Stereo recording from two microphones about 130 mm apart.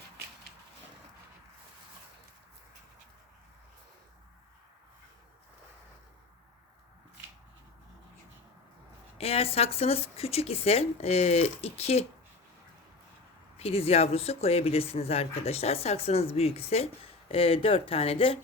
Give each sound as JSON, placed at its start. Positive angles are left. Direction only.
{"t": 9.1, "sound": "speech", "side_deg": 50}
{"t": 13.6, "sound": "speech", "side_deg": 50}